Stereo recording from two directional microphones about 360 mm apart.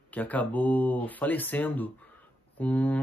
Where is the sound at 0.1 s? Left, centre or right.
Centre.